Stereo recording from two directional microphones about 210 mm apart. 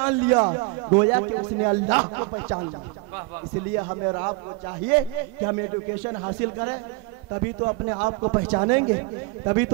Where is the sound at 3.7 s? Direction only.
25° right (ahead or behind).